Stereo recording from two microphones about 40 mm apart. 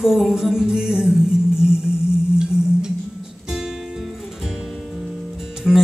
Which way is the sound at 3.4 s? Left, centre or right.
Centre.